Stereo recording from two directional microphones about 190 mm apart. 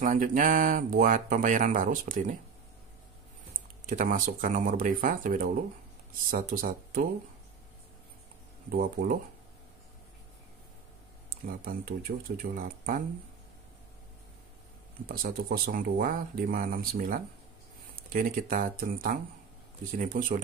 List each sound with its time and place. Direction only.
0.0 s speech: 45° right (ahead or behind)
3.8 s speech: 45° right (ahead or behind)
8.7 s speech: 50° right (ahead or behind)
11.2 s speech: 50° right (ahead or behind)
15.0 s speech: 50° right (ahead or behind)